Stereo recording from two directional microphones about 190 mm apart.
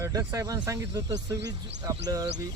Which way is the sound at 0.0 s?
15° right (ahead or behind).